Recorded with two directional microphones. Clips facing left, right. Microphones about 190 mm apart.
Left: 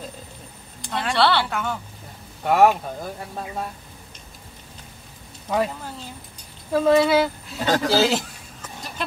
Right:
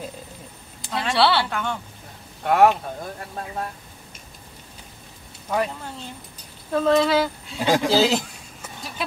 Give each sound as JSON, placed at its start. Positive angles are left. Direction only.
{"t": 0.8, "sound": "speech", "side_deg": 0}
{"t": 5.5, "sound": "speech", "side_deg": 0}
{"t": 7.6, "sound": "a man's voice", "side_deg": -10}
{"t": 7.9, "sound": "speech", "side_deg": 5}
{"t": 8.6, "sound": "a sound", "side_deg": -5}